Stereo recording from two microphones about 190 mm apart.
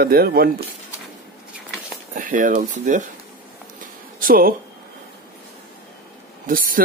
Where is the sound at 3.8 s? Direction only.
45° right (ahead or behind).